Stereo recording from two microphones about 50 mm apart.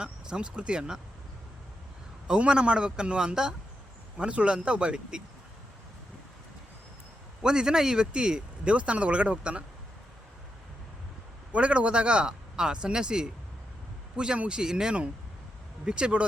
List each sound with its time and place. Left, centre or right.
0.0 s speech: centre
2.4 s speech: right
4.2 s speech: right
7.4 s speech: centre
11.5 s speech: right
14.3 s speech: centre